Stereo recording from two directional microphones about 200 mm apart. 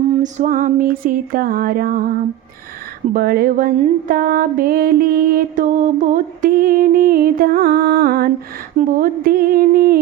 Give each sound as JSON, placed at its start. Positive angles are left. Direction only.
{"t": 0.1, "sound": "music", "side_deg": -35}